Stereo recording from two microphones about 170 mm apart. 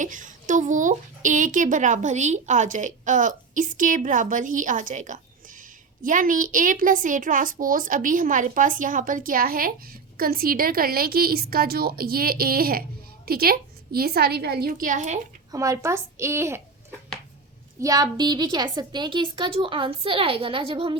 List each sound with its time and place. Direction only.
0.0 s a woman's voice: 50° right (ahead or behind)
15.5 s a woman's voice: 20° right (ahead or behind)
17.7 s a woman's voice: 20° right (ahead or behind)